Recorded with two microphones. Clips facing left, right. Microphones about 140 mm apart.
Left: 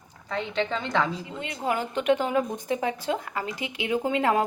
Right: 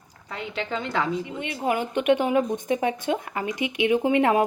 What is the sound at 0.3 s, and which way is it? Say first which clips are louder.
Speech: left 3 dB; 5° right (ahead or behind).